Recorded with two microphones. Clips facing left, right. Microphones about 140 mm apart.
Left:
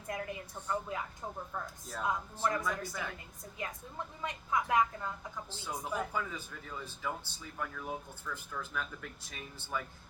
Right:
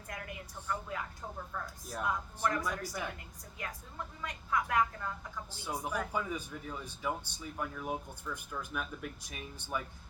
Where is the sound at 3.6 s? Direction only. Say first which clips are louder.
Left 2 dB; 25° left (ahead or behind).